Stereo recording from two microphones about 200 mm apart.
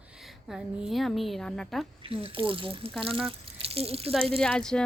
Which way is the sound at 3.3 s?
30° right (ahead or behind).